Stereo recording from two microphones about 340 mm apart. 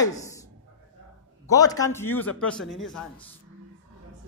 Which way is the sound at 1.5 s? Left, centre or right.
Centre.